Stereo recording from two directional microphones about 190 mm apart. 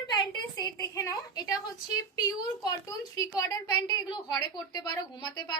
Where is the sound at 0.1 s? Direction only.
20° left (ahead or behind).